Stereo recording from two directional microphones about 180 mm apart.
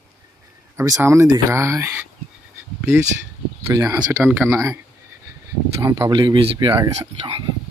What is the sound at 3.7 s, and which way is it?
Speech, 20° right (ahead or behind).